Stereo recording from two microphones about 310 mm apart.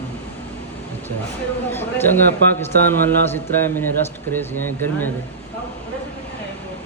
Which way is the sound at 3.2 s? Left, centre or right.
Centre.